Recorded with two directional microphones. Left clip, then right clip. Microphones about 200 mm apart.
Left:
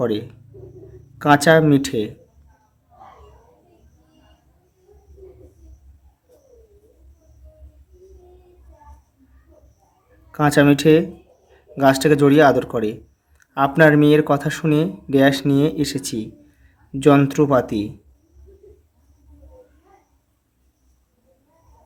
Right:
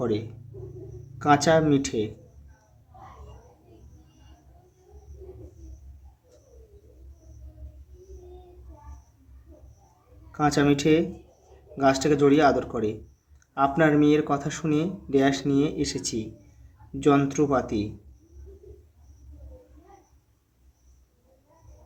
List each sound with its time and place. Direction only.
0.0 s speech: 45° left (ahead or behind)
10.3 s speech: 45° left (ahead or behind)